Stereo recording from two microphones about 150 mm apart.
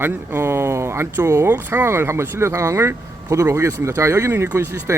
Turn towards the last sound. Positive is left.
turn(degrees=-20)  # may be behind; listen again after turning